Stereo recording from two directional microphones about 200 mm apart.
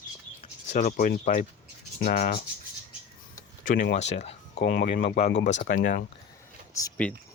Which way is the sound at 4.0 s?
35° left (ahead or behind).